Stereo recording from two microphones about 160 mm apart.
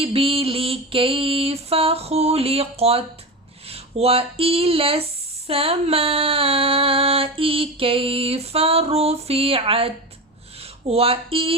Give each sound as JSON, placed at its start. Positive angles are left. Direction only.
{"t": 0.0, "sound": "female singing", "side_deg": -35}
{"t": 3.7, "sound": "speech", "side_deg": -40}
{"t": 5.5, "sound": "female singing", "side_deg": -35}